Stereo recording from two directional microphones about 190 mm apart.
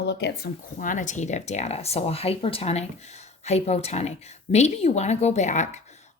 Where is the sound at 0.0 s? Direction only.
60° left (ahead or behind).